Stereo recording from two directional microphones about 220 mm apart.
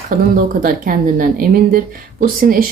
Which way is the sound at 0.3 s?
40° right (ahead or behind).